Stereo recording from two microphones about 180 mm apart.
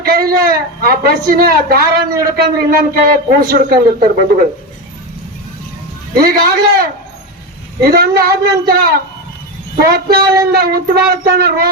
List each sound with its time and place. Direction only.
0.0 s a woman's voice: 55° right (ahead or behind)
6.2 s a man's voice: 55° right (ahead or behind)
9.9 s a man's voice: 55° right (ahead or behind)